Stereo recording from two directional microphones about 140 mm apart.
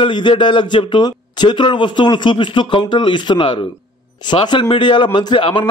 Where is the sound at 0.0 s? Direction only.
35° left (ahead or behind).